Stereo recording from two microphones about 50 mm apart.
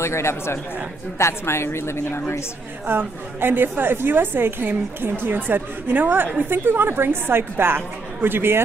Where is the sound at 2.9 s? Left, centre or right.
Right.